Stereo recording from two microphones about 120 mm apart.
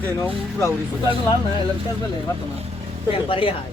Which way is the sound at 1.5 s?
35° left (ahead or behind).